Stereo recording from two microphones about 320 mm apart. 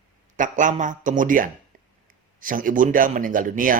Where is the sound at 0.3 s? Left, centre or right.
Right.